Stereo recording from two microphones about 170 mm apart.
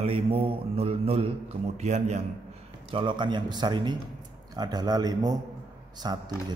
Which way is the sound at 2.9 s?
30° right (ahead or behind).